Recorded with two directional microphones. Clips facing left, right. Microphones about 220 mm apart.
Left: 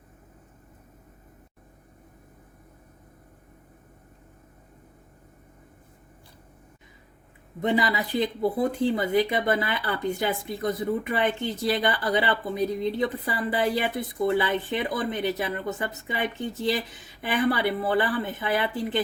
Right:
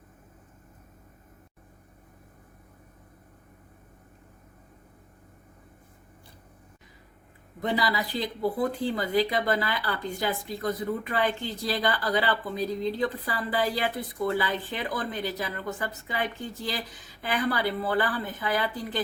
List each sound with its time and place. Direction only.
7.6 s speech: 20° left (ahead or behind)